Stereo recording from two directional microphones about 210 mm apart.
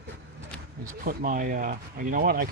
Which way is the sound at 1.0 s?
40° right (ahead or behind).